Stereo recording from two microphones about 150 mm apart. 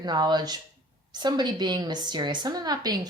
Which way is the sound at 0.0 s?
30° right (ahead or behind).